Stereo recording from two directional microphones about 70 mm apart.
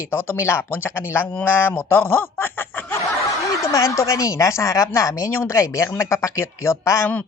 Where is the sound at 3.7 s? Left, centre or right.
Left.